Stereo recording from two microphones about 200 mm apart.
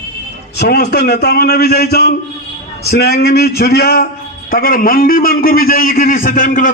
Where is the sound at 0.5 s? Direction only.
55° left (ahead or behind).